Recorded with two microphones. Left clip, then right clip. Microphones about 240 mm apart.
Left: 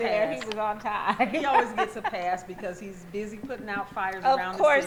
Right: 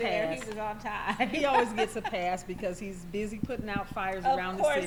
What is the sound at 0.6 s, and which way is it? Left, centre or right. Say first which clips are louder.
Speech: left 8 dB; centre.